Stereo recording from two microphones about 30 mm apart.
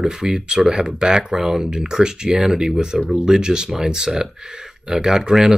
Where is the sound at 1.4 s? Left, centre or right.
Centre.